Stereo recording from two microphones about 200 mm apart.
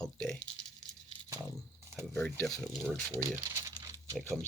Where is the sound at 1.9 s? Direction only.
15° right (ahead or behind).